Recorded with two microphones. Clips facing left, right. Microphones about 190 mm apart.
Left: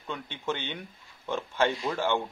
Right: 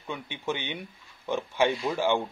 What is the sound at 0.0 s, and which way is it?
Speech, 10° right (ahead or behind).